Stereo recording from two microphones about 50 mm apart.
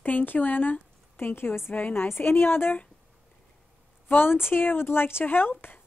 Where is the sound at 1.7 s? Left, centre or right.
Left.